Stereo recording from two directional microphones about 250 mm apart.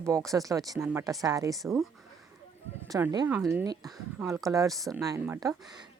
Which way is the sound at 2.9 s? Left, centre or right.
Centre.